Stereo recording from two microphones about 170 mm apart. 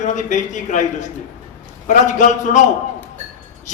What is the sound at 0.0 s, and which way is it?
Speech, 45° left (ahead or behind).